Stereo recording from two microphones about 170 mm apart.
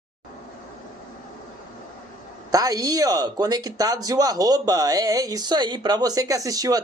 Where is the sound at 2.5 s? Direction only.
20° right (ahead or behind).